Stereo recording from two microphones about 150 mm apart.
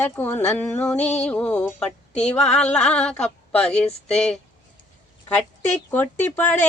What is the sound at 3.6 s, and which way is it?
Speech, 45° left (ahead or behind).